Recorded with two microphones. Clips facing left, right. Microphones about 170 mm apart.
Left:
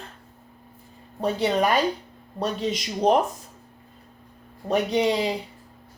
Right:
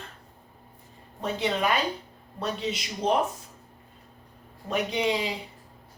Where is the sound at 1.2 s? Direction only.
40° left (ahead or behind).